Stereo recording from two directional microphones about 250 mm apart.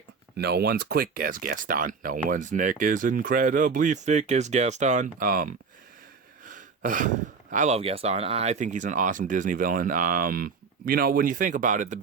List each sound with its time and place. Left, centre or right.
0.3 s speech: right